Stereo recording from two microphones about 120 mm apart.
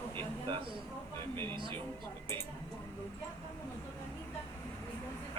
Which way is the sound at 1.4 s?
40° right (ahead or behind).